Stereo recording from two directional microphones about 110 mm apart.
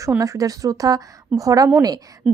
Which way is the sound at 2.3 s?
10° right (ahead or behind).